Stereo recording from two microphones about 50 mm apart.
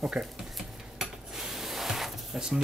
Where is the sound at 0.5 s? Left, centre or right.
Centre.